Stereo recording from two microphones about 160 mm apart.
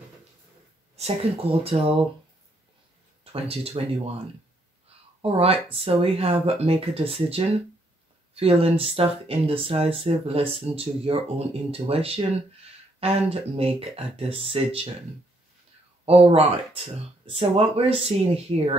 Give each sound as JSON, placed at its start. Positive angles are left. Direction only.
{"t": 0.9, "sound": "speech", "side_deg": -40}
{"t": 3.3, "sound": "speech", "side_deg": -35}
{"t": 5.2, "sound": "speech", "side_deg": -40}
{"t": 16.1, "sound": "speech", "side_deg": -35}